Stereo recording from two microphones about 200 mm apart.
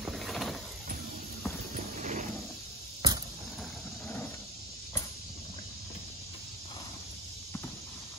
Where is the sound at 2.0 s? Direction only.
35° right (ahead or behind).